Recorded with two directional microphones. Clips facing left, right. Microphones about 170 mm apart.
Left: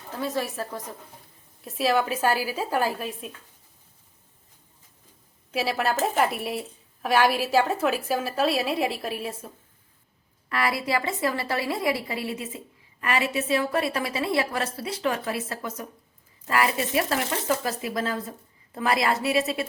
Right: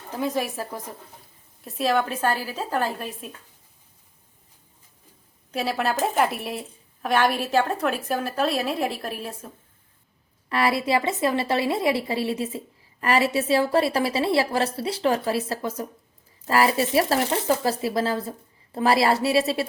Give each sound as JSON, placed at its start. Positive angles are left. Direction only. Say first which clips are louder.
{"t": 0.1, "sound": "a woman's voice", "louder": "right 3 dB", "side_deg": -15}
{"t": 1.6, "sound": "a woman's voice", "louder": "even", "side_deg": 0}
{"t": 5.5, "sound": "a woman's voice", "louder": "even", "side_deg": 0}
{"t": 10.5, "sound": "a woman's voice", "louder": "right 4 dB", "side_deg": -25}